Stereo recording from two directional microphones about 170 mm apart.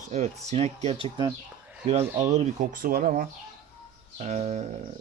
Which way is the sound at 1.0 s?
25° right (ahead or behind).